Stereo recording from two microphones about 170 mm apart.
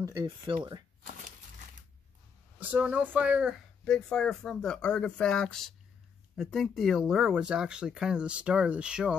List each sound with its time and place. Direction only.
0.0 s speech: 25° right (ahead or behind)
2.6 s speech: 10° right (ahead or behind)
3.8 s speech: 5° left (ahead or behind)